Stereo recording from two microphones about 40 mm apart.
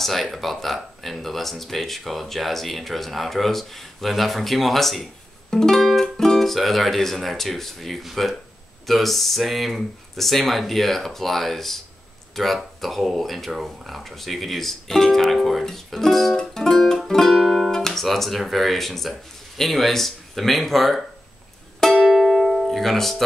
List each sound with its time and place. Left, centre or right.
0.0 s speech: centre
15.6 s music: centre
17.4 s music: centre
17.6 s guitar: centre
18.0 s speech: centre
21.7 s music: centre
22.0 s music: centre